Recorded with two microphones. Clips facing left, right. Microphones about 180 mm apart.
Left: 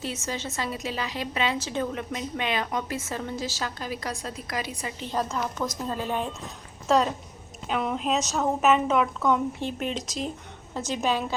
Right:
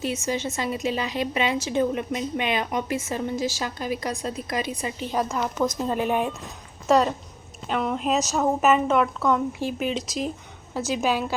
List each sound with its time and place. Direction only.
0.0 s a woman's voice: 15° right (ahead or behind)